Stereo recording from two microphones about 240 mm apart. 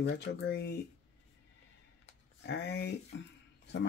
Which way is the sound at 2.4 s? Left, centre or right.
Left.